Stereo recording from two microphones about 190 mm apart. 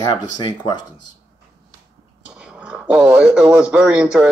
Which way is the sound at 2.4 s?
5° right (ahead or behind).